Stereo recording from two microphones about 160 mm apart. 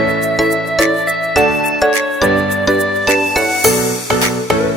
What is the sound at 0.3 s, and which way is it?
Music, centre (ahead or behind).